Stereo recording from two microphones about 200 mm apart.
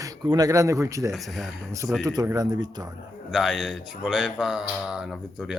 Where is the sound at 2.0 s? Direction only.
20° right (ahead or behind).